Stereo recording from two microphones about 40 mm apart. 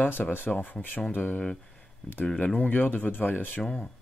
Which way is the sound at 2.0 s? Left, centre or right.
Left.